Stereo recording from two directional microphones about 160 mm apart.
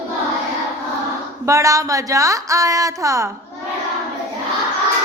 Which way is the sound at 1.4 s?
20° right (ahead or behind).